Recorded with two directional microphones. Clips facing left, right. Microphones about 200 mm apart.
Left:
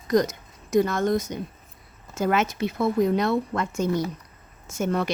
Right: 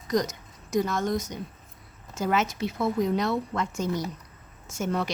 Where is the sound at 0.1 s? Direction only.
55° left (ahead or behind).